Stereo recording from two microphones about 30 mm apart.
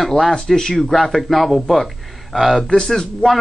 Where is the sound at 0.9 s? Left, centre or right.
Centre.